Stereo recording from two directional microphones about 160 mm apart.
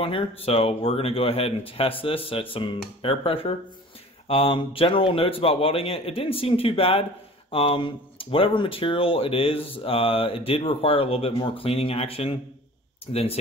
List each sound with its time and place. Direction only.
0.0 s speech: 35° left (ahead or behind)